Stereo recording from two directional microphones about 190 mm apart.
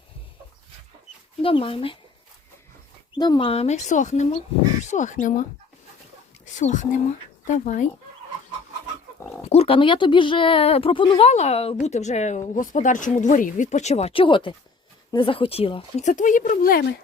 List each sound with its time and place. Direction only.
1.4 s speech: 30° left (ahead or behind)
3.2 s speech: 25° left (ahead or behind)
9.5 s speech: 30° left (ahead or behind); by 16.8 s 50° left (ahead or behind)